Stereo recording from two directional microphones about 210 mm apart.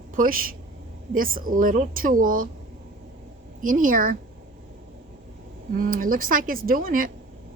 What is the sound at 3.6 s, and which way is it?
Speech, 40° right (ahead or behind).